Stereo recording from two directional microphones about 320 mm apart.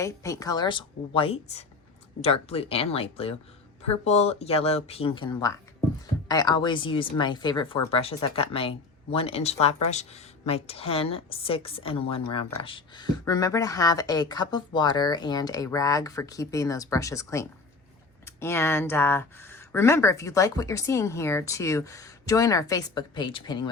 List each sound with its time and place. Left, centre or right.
0.0 s a woman's voice: centre